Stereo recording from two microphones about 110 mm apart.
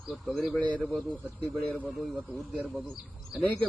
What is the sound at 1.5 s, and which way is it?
Speech, 15° left (ahead or behind).